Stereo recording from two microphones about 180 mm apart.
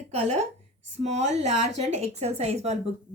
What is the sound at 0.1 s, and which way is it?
A woman's voice, 40° right (ahead or behind).